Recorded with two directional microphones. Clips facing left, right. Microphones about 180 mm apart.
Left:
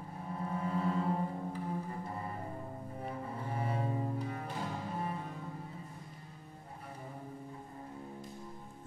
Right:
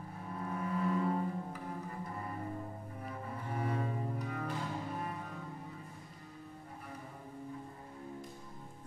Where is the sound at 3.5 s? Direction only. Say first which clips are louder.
Even; 30° left (ahead or behind).